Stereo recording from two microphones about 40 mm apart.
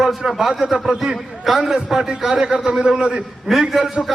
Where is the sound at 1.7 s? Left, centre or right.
Centre.